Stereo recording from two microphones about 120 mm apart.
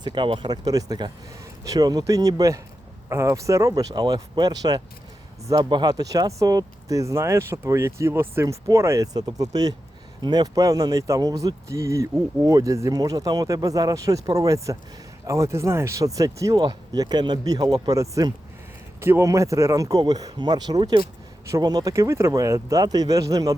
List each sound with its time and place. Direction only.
0.0 s speech: 40° right (ahead or behind)